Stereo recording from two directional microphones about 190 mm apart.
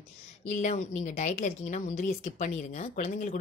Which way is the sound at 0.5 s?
40° left (ahead or behind).